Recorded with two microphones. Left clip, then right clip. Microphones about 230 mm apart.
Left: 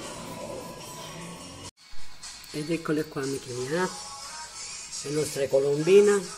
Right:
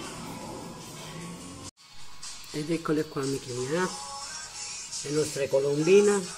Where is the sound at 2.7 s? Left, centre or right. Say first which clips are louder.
Even; centre.